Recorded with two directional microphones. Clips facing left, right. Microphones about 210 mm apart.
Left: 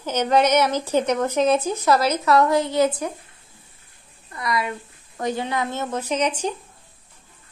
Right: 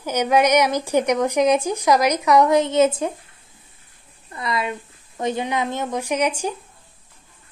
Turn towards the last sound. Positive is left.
turn(degrees=-10)  # may be behind; listen again after turning